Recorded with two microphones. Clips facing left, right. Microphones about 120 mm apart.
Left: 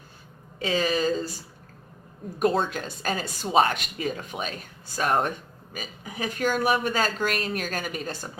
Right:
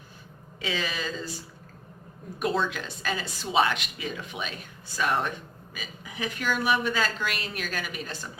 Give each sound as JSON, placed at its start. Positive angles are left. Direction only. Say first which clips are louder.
{"t": 0.6, "sound": "a woman's voice", "louder": "left 7 dB", "side_deg": 40}
{"t": 2.4, "sound": "a woman's voice", "louder": "left 4 dB", "side_deg": 45}